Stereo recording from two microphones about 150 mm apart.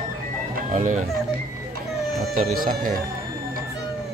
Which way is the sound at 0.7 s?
55° right (ahead or behind).